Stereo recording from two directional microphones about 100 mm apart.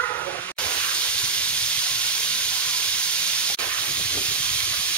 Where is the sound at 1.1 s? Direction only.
10° left (ahead or behind).